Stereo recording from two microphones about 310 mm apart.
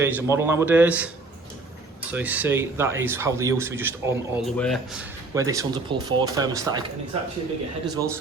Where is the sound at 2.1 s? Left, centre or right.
Centre.